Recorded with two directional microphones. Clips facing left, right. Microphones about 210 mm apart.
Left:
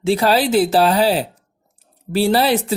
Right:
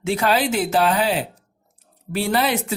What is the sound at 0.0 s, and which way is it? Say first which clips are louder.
Speech: left 4 dB; 35° left (ahead or behind).